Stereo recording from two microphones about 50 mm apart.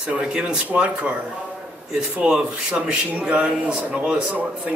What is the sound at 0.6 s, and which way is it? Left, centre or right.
Speech, right.